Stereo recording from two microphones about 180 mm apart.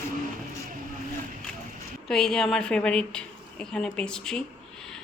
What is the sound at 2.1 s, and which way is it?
A woman's voice, 5° left (ahead or behind).